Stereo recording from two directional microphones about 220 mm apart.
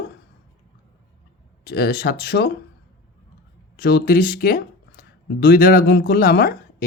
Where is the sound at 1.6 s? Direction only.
45° left (ahead or behind).